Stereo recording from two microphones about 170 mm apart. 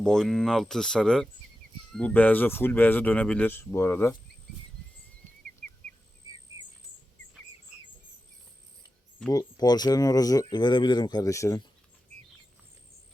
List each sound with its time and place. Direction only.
0.0 s speech: 5° left (ahead or behind)
9.3 s speech: 20° left (ahead or behind)